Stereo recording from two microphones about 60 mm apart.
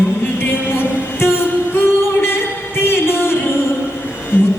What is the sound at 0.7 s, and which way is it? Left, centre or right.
Music, left.